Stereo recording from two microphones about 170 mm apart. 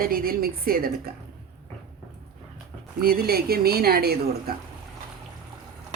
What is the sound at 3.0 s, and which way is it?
A woman's voice, 65° right (ahead or behind).